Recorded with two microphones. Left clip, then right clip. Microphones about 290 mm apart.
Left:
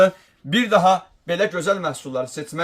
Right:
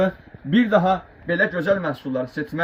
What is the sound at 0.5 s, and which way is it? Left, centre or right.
Speech, left.